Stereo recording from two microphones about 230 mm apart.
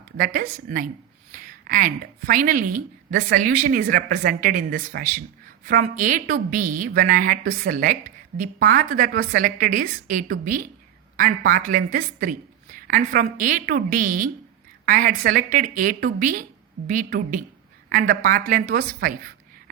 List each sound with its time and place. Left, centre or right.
0.3 s a woman's voice: right